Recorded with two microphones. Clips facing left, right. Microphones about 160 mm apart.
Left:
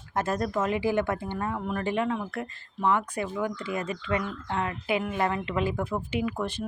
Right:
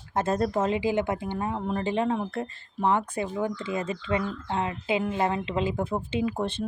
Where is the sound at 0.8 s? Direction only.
20° right (ahead or behind).